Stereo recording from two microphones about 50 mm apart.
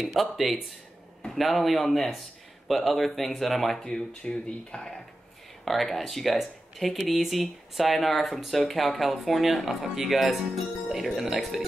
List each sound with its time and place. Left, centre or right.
0.0 s speech: centre
3.8 s speech: centre
5.7 s speech: centre